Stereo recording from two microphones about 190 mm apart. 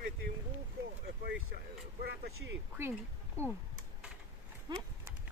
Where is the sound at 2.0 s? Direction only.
65° right (ahead or behind).